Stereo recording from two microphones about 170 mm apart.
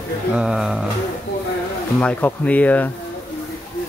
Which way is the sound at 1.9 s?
10° left (ahead or behind).